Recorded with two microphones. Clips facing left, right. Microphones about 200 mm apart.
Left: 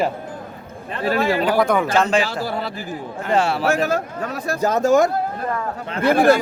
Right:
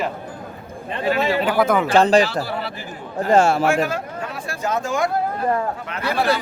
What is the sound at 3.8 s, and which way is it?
A man's voice, 40° left (ahead or behind).